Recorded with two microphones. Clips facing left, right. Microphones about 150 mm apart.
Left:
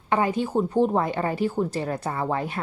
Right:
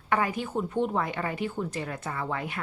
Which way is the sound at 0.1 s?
25° left (ahead or behind).